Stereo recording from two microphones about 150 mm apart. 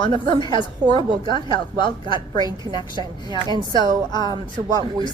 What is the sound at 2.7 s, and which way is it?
A woman's voice, 30° left (ahead or behind).